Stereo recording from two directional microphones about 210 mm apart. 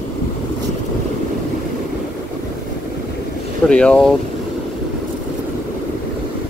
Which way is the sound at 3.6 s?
5° left (ahead or behind).